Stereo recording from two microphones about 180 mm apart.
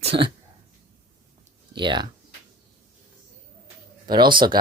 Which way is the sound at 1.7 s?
25° right (ahead or behind).